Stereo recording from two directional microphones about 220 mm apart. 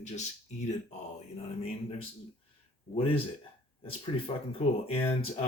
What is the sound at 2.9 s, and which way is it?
Speech, 25° left (ahead or behind).